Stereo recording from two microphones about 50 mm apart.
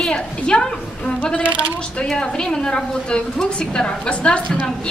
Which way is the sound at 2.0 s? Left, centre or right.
Centre.